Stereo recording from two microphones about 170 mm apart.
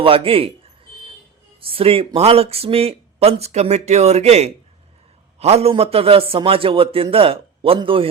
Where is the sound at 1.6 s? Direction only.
30° right (ahead or behind).